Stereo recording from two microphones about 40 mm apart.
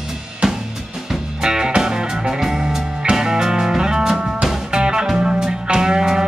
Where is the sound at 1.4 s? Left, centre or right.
Centre.